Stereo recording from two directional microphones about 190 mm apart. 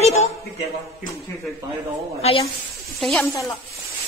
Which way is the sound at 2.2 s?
30° left (ahead or behind).